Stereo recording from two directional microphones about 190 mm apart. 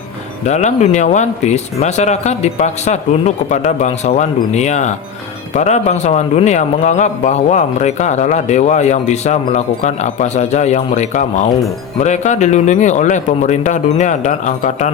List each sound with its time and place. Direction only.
0.4 s a man's voice: 35° left (ahead or behind)